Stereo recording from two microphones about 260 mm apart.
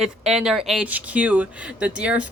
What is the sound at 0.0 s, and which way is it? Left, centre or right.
A woman's voice, centre.